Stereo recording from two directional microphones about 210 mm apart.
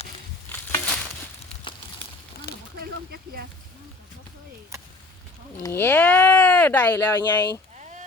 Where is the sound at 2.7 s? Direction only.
45° right (ahead or behind).